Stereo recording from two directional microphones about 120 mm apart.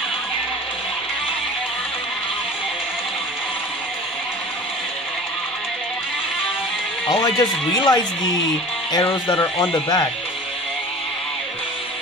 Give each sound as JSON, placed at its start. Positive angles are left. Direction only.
{"t": 7.1, "sound": "speech", "side_deg": 35}
{"t": 9.3, "sound": "speech", "side_deg": 30}